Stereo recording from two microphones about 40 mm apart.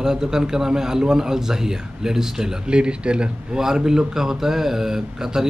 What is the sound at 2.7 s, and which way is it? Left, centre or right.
Speech, right.